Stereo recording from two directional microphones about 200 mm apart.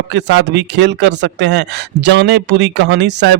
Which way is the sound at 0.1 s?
60° right (ahead or behind).